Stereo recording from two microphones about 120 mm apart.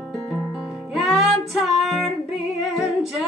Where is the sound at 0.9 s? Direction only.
5° right (ahead or behind).